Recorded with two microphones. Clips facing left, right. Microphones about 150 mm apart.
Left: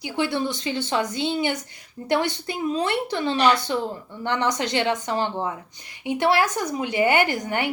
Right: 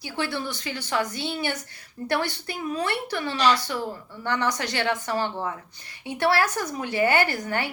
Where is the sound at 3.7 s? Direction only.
20° left (ahead or behind).